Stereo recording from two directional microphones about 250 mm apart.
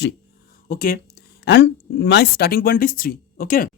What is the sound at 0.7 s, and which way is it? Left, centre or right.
Speech, left.